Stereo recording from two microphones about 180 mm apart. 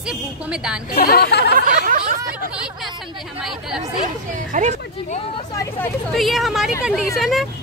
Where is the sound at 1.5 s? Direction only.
45° right (ahead or behind).